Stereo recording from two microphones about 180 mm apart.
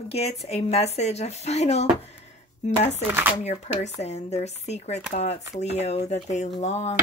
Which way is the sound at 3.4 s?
40° left (ahead or behind).